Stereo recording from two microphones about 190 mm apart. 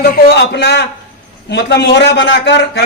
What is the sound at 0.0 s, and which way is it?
A man's voice, 55° left (ahead or behind).